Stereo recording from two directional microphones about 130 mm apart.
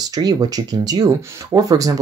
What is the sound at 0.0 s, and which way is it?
Speech, 30° right (ahead or behind).